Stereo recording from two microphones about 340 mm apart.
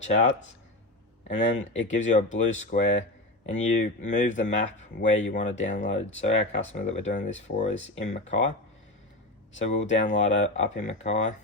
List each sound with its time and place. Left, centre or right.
0.0 s speech: centre
9.6 s speech: left